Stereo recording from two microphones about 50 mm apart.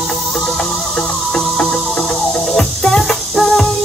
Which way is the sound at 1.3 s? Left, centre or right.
Centre.